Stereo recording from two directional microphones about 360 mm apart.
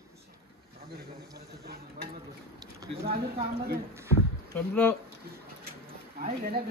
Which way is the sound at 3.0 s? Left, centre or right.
Right.